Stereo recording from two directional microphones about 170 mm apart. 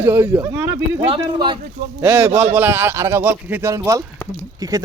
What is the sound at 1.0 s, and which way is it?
Speech, 30° right (ahead or behind).